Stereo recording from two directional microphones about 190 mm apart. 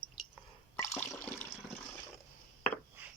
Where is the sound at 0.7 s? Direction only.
15° left (ahead or behind).